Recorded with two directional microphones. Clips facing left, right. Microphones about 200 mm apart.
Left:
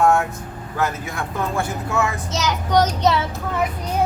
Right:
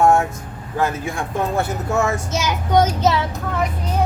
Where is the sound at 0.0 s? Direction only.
25° right (ahead or behind).